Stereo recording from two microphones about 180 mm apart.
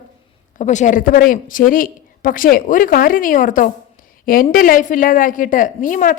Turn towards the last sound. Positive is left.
turn(degrees=45)  # may be behind; listen again after turning